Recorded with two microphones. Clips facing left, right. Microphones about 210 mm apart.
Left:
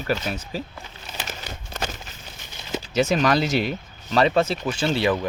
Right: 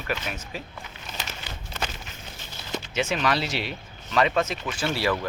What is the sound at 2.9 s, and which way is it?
Speech, 40° left (ahead or behind).